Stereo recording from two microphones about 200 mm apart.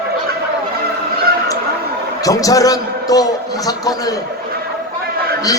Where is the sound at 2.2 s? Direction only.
15° left (ahead or behind).